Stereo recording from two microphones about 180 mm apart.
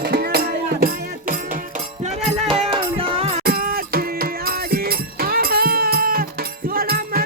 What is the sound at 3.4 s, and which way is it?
Music, 55° right (ahead or behind).